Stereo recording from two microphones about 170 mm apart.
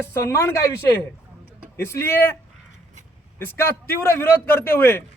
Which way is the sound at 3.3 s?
15° left (ahead or behind).